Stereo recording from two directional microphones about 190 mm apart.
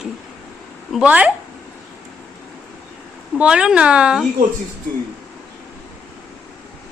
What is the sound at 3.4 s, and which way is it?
Speech, 5° right (ahead or behind).